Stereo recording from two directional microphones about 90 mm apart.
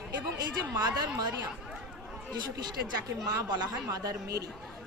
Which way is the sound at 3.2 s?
50° right (ahead or behind).